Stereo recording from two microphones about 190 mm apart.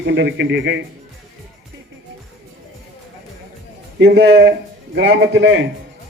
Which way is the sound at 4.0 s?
65° right (ahead or behind).